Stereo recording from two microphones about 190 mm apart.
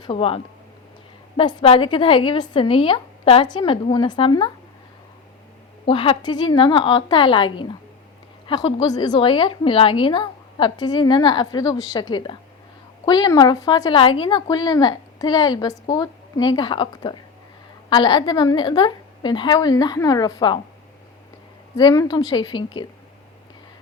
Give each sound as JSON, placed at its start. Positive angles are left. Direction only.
{"t": 0.0, "sound": "a woman's voice", "side_deg": 30}
{"t": 5.8, "sound": "a woman's voice", "side_deg": 30}
{"t": 21.8, "sound": "a woman's voice", "side_deg": 20}